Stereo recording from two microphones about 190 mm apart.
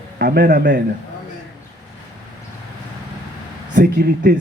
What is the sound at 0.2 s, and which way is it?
Speech, 60° right (ahead or behind).